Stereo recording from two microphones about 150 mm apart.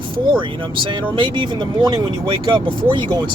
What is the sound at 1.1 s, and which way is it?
Speech, 30° right (ahead or behind).